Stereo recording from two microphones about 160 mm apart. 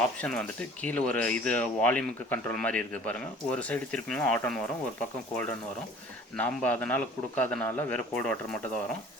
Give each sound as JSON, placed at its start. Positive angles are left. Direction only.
{"t": 0.2, "sound": "speech", "side_deg": 5}